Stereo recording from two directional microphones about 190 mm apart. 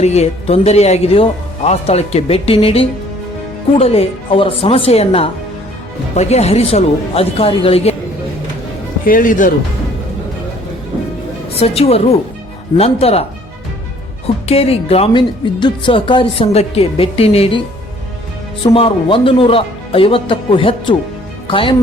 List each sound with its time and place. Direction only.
0.0 s speech: 35° left (ahead or behind)
9.0 s speech: 45° left (ahead or behind)
11.6 s speech: 30° left (ahead or behind)
14.4 s speech: 30° left (ahead or behind)
18.6 s speech: 30° left (ahead or behind)